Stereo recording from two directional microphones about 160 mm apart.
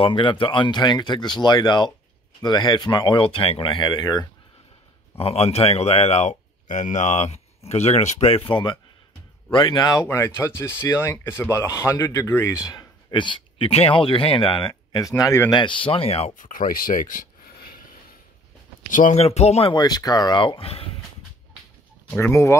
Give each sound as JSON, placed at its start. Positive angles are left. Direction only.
{"t": 0.0, "sound": "speech", "side_deg": 30}
{"t": 5.1, "sound": "speech", "side_deg": 40}
{"t": 15.5, "sound": "speech", "side_deg": 30}
{"t": 16.3, "sound": "speech", "side_deg": 55}
{"t": 18.9, "sound": "speech", "side_deg": 55}
{"t": 19.7, "sound": "speech", "side_deg": 25}
{"t": 22.1, "sound": "speech", "side_deg": 15}